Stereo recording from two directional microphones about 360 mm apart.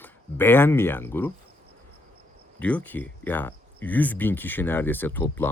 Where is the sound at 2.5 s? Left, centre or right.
Centre.